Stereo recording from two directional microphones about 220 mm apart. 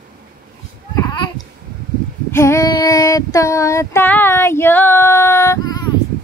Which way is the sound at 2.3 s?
10° left (ahead or behind).